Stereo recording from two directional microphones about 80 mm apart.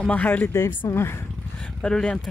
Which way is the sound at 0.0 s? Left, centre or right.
Centre.